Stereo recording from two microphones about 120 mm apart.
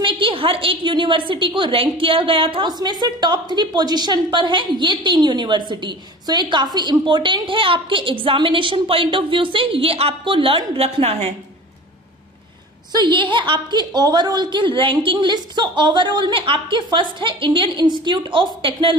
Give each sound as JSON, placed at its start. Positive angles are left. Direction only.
{"t": 0.0, "sound": "a woman's voice", "side_deg": -45}
{"t": 12.9, "sound": "a woman's voice", "side_deg": -40}